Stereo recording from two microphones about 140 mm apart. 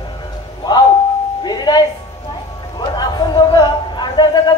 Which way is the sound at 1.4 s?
30° left (ahead or behind).